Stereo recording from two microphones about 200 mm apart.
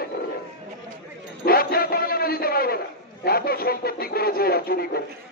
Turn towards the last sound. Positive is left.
turn(degrees=50)  # may be behind; listen again after turning